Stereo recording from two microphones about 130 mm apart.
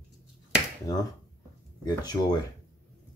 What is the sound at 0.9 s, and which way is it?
Speech, 30° left (ahead or behind).